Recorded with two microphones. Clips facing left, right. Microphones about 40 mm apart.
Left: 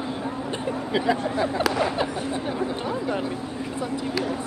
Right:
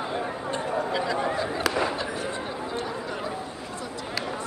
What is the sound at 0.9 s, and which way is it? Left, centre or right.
Speech, left.